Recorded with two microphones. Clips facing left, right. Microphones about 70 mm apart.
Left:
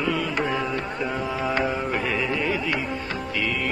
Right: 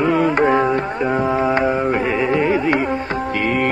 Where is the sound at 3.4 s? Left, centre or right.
Right.